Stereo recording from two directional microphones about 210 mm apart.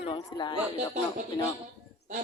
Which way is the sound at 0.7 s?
35° right (ahead or behind).